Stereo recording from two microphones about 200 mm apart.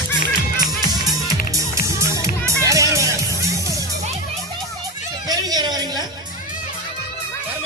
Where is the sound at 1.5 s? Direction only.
15° right (ahead or behind).